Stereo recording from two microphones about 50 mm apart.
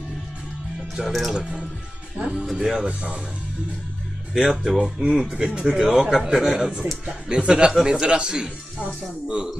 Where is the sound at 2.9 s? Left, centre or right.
Right.